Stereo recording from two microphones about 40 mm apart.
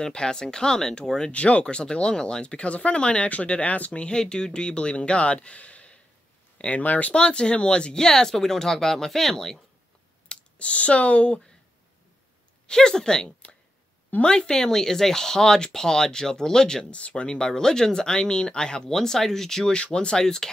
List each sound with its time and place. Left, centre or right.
0.0 s speech: centre
1.3 s speech: left
4.2 s speech: centre; by 7.2 s left
7.2 s speech: left
10.2 s speech: left
12.6 s speech: centre
16.9 s speech: left; by 19.7 s centre
19.7 s speech: left